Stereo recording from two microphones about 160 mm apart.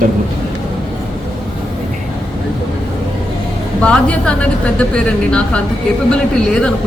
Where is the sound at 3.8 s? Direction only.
10° left (ahead or behind).